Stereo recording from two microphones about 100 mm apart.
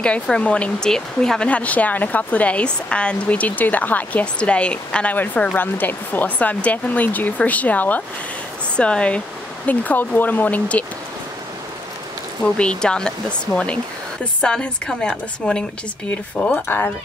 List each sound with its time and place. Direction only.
0.0 s speech: 10° left (ahead or behind)
12.5 s speech: 10° left (ahead or behind)
14.4 s speech: 10° left (ahead or behind)